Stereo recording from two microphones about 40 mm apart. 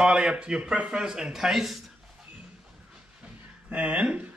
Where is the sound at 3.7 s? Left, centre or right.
Right.